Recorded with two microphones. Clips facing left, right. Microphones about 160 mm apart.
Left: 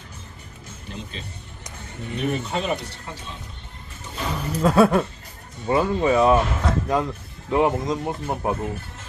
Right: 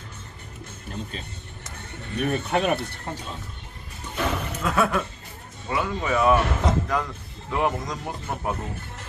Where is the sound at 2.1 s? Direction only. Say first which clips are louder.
Right 1 dB; 60° right (ahead or behind).